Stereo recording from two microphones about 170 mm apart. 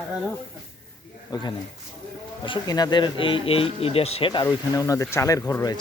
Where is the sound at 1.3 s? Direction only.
25° left (ahead or behind).